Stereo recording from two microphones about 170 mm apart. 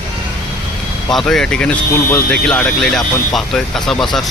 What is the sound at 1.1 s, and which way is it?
Speech, 5° left (ahead or behind).